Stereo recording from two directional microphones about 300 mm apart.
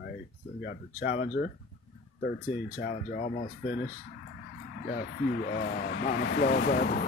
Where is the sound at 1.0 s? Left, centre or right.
Left.